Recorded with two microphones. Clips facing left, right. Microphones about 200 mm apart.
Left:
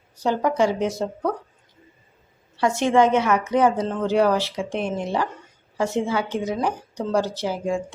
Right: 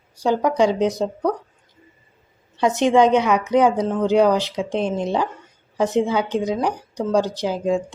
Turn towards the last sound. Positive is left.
turn(degrees=-20)  # may be behind; listen again after turning